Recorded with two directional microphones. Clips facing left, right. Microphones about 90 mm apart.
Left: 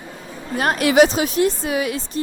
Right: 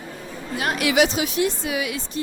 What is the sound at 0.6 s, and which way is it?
A woman's voice, 40° left (ahead or behind).